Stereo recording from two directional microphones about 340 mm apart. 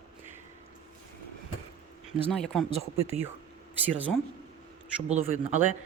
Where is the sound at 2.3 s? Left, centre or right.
Centre.